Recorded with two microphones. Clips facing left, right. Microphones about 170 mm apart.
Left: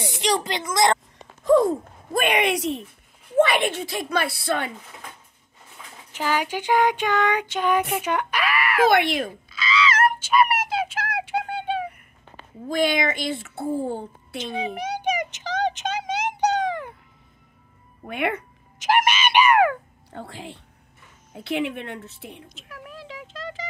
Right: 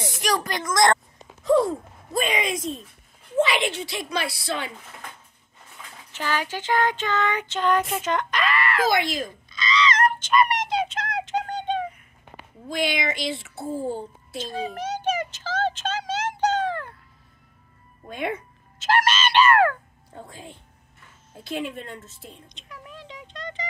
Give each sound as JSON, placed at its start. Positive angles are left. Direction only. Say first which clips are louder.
{"t": 0.2, "sound": "a woman's voice", "louder": "left 2 dB", "side_deg": 20}
{"t": 1.4, "sound": "speech", "louder": "left 2 dB", "side_deg": 50}
{"t": 3.3, "sound": "a woman's voice", "louder": "left 3 dB", "side_deg": 55}
{"t": 6.1, "sound": "child singing", "louder": "left 3 dB", "side_deg": 15}
{"t": 7.9, "sound": "a sound", "louder": "left 1 dB", "side_deg": 10}
{"t": 8.8, "sound": "speech", "louder": "left 8 dB", "side_deg": 65}
{"t": 9.5, "sound": "a sound", "louder": "right 1 dB", "side_deg": 5}
{"t": 12.6, "sound": "a woman's voice", "louder": "left 4 dB", "side_deg": 45}
{"t": 14.4, "sound": "a sound", "louder": "left 1 dB", "side_deg": 15}
{"t": 18.0, "sound": "a woman's voice", "louder": "left 3 dB", "side_deg": 70}
{"t": 18.8, "sound": "fowl", "louder": "left 1 dB", "side_deg": 15}
{"t": 20.1, "sound": "a woman's voice", "louder": "left 4 dB", "side_deg": 75}
{"t": 22.5, "sound": "a sound", "louder": "left 2 dB", "side_deg": 5}